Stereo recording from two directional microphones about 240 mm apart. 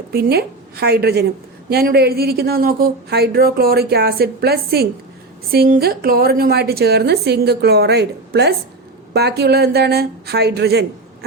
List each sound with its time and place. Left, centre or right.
0.1 s a woman's voice: right